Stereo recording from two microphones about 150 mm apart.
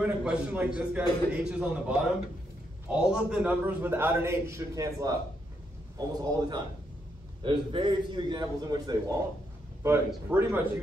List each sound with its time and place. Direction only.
0.0 s a man's voice: 5° right (ahead or behind)